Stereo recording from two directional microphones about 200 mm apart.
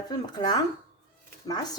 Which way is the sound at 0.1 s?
20° left (ahead or behind).